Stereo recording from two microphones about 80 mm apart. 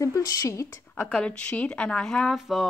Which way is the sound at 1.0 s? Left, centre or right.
Centre.